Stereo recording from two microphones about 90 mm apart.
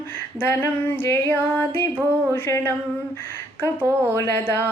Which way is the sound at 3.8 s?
30° right (ahead or behind).